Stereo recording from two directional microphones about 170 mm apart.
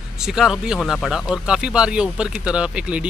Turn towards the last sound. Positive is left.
turn(degrees=-5)  # may be behind; listen again after turning